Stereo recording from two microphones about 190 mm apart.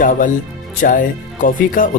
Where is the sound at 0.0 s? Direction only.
45° left (ahead or behind).